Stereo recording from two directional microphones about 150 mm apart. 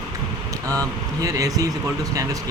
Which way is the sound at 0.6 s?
25° right (ahead or behind).